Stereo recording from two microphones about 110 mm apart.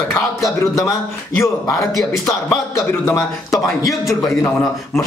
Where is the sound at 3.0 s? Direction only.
25° left (ahead or behind).